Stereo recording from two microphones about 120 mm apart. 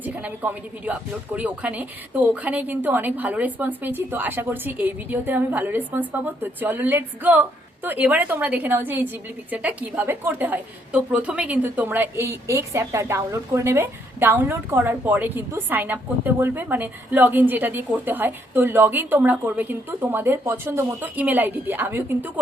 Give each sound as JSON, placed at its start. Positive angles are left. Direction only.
{"t": 0.0, "sound": "a woman's voice", "side_deg": -10}